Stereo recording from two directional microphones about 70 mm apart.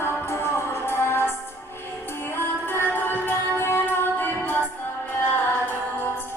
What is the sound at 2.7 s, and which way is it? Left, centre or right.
Music, left.